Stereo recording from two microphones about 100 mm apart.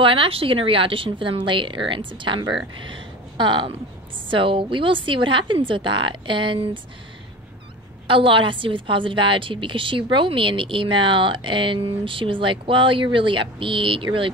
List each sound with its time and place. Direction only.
0.0 s a woman's voice: 60° right (ahead or behind)
8.1 s a woman's voice: 60° right (ahead or behind)